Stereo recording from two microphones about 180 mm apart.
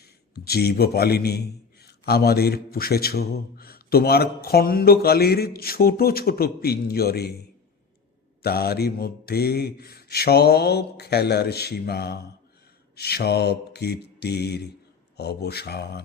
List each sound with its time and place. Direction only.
0.0 s a man's voice: 60° left (ahead or behind)
8.4 s a man's voice: 60° left (ahead or behind)